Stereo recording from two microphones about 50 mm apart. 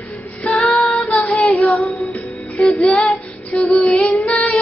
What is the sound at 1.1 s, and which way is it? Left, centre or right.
Child singing, left.